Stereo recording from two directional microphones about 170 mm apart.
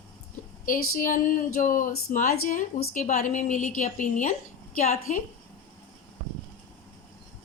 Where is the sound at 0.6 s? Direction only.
55° left (ahead or behind).